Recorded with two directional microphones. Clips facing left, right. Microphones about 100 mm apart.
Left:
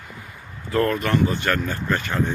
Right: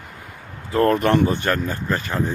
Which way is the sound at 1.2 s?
30° right (ahead or behind).